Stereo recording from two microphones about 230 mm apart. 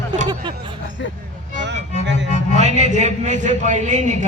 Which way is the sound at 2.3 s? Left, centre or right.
Right.